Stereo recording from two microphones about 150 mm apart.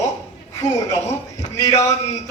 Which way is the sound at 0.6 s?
20° left (ahead or behind).